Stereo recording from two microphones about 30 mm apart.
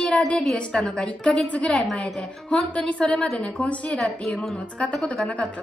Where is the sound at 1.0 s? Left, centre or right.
Left.